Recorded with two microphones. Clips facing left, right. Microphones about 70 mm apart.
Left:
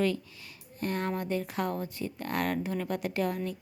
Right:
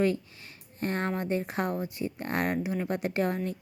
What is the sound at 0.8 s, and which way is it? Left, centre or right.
Speech, right.